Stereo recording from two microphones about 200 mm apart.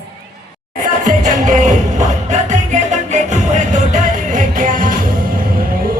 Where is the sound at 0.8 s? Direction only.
40° right (ahead or behind).